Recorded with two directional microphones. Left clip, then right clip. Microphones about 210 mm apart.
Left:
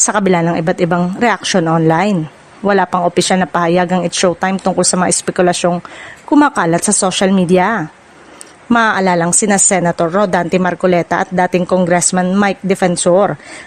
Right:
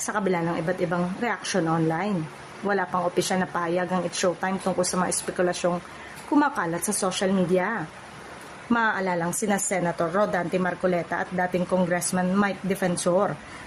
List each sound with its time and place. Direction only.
0.0 s a woman's voice: 45° left (ahead or behind)